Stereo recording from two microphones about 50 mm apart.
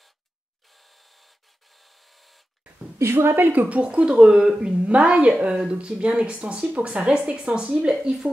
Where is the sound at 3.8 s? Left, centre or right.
Right.